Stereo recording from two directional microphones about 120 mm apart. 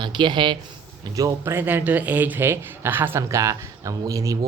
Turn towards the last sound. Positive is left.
turn(degrees=-25)  # may be behind; listen again after turning